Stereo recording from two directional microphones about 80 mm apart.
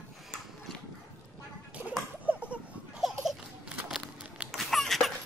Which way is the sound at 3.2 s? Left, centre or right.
Centre.